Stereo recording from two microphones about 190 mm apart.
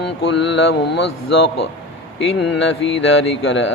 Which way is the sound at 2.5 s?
70° left (ahead or behind).